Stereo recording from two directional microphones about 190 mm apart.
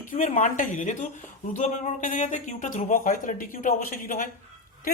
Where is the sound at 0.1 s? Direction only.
40° left (ahead or behind).